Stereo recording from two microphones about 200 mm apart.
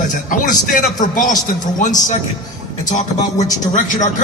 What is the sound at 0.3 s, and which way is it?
Speech, 40° left (ahead or behind).